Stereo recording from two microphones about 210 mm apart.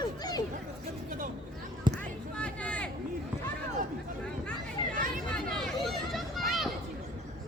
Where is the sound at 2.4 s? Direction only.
5° left (ahead or behind).